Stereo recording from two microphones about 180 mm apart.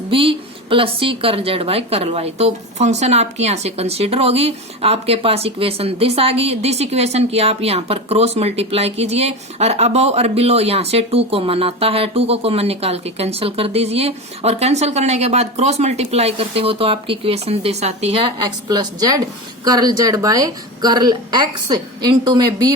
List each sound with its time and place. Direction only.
0.1 s a woman's voice: 30° right (ahead or behind)